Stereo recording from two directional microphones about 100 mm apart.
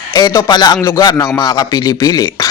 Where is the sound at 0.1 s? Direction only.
40° left (ahead or behind).